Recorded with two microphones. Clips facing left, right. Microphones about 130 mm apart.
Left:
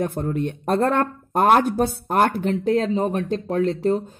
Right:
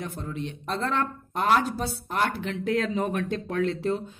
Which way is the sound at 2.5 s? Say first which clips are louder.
Left 6 dB; 35° left (ahead or behind).